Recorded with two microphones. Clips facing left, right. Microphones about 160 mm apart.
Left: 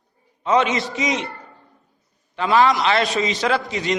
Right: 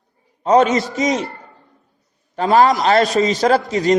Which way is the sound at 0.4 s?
40° right (ahead or behind).